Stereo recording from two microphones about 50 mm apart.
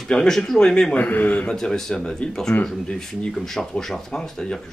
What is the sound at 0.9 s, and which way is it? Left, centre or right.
Speech, left.